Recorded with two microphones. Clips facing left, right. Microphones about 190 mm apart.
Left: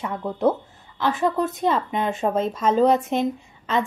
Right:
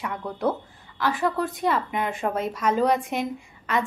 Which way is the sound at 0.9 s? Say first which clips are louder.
Left 3 dB; 25° left (ahead or behind).